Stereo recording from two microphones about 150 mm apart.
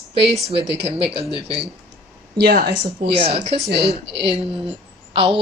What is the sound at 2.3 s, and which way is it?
Speech, 90° right.